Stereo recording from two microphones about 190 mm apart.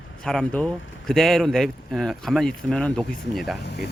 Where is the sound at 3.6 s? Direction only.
60° left (ahead or behind).